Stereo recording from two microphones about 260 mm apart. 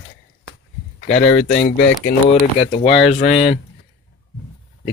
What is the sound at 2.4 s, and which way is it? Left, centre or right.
Speech, left.